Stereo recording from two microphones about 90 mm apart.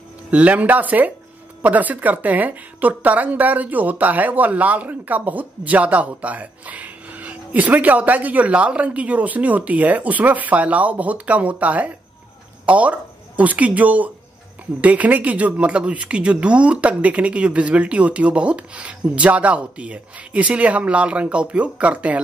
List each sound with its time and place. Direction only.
0.3 s a woman's voice: 15° right (ahead or behind)